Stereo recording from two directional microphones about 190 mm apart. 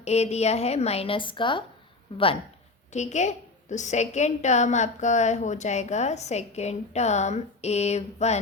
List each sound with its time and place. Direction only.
0.0 s a woman's voice: 35° left (ahead or behind)